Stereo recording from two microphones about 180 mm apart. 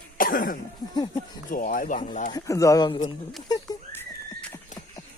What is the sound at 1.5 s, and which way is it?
Speech, 50° left (ahead or behind).